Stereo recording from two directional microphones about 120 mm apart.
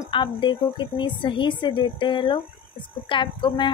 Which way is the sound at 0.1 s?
40° left (ahead or behind).